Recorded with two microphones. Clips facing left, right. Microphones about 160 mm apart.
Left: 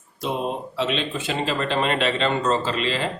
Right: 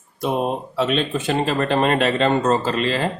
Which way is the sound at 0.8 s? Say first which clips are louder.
Right 5 dB; 45° right (ahead or behind).